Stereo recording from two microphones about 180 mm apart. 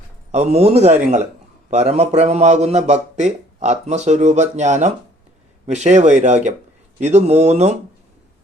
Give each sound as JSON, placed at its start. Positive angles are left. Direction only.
{"t": 0.3, "sound": "a man's voice", "side_deg": -40}